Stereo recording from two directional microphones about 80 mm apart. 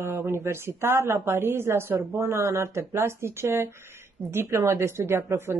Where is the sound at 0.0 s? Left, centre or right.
Right.